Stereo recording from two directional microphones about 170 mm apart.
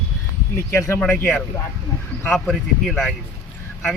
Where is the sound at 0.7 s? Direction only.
15° left (ahead or behind).